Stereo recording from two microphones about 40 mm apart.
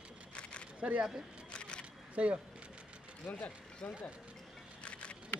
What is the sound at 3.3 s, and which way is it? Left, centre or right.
Speech, left.